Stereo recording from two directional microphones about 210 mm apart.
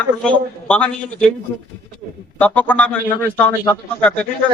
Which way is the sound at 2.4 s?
5° left (ahead or behind).